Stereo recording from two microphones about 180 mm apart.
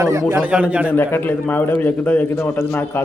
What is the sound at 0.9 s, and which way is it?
A man's voice, 10° left (ahead or behind).